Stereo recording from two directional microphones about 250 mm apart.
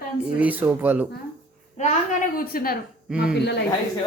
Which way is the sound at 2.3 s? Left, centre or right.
Left.